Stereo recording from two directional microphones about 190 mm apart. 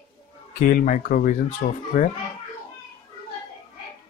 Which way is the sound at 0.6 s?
50° left (ahead or behind).